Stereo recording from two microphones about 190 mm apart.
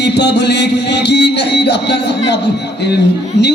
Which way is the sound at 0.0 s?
65° left (ahead or behind).